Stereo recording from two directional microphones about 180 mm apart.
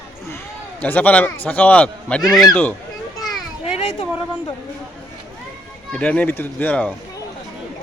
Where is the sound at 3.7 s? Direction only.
35° left (ahead or behind).